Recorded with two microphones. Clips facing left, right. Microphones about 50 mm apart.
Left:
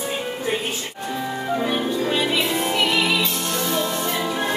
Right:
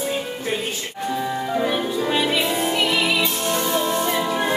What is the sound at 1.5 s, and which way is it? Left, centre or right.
Music, centre.